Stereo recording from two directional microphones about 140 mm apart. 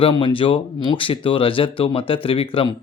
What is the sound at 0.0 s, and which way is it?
Speech, 40° left (ahead or behind).